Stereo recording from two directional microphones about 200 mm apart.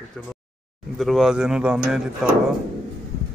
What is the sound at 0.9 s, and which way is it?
Speech, centre (ahead or behind).